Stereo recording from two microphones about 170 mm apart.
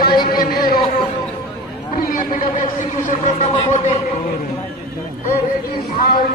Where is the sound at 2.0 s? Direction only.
55° left (ahead or behind).